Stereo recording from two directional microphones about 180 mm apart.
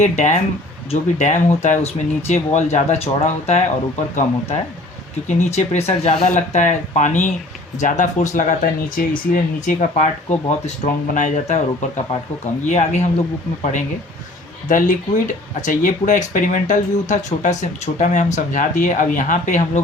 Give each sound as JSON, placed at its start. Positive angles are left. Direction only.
{"t": 0.0, "sound": "speech", "side_deg": 40}
{"t": 14.7, "sound": "speech", "side_deg": 45}